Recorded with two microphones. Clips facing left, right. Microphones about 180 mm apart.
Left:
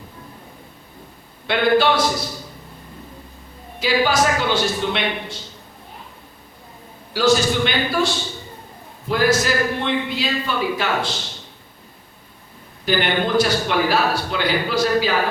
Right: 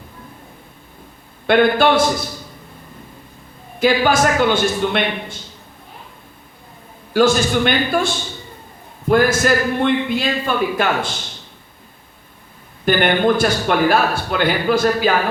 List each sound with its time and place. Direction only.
1.5 s a man's voice: 50° right (ahead or behind)
3.8 s a man's voice: 50° right (ahead or behind)
7.1 s a man's voice: 50° right (ahead or behind)
12.8 s a man's voice: 50° right (ahead or behind)